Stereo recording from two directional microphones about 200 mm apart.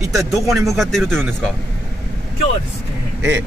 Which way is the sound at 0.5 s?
Centre (ahead or behind).